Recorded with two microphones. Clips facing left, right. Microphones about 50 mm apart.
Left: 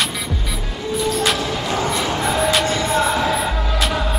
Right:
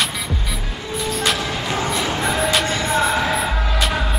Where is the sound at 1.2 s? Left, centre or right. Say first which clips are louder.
Left 1 dB; centre.